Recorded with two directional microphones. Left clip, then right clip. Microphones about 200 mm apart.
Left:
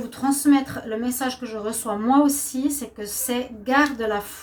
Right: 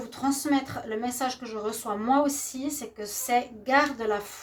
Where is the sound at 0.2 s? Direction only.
40° right (ahead or behind).